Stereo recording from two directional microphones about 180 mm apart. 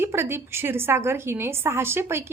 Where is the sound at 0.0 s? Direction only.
15° right (ahead or behind).